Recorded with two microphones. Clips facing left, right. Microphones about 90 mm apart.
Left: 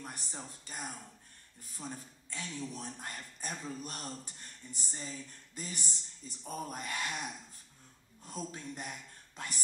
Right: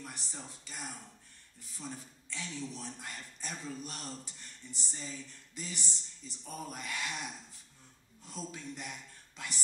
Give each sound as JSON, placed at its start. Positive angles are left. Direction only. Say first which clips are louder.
{"t": 0.0, "sound": "speech", "louder": "left 1 dB", "side_deg": 40}
{"t": 8.5, "sound": "speech", "louder": "left 1 dB", "side_deg": 40}